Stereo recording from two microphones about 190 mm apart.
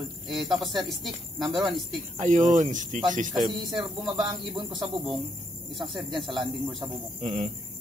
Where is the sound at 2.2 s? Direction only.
40° right (ahead or behind).